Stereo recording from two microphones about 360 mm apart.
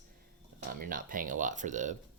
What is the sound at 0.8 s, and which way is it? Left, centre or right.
Speech, right.